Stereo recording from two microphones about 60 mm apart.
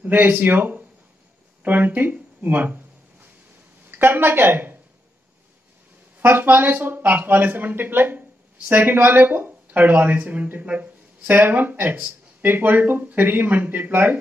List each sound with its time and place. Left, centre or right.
0.0 s speech: right
2.4 s a sound: right
3.9 s speech: right
6.1 s speech: right